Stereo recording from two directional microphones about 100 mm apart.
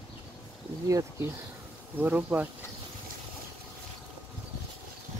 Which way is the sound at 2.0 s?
15° right (ahead or behind).